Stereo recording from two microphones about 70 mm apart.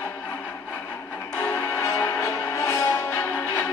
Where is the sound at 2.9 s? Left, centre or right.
Left.